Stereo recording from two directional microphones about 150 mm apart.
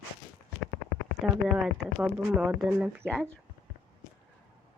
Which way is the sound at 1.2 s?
5° right (ahead or behind).